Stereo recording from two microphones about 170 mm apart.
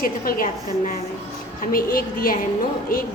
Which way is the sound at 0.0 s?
55° left (ahead or behind).